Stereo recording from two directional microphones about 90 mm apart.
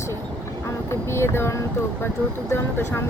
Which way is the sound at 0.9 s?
30° left (ahead or behind).